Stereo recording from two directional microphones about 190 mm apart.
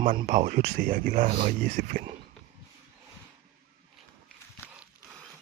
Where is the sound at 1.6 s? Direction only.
50° right (ahead or behind).